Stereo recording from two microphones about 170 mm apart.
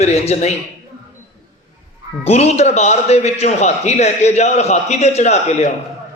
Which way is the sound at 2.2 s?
40° left (ahead or behind).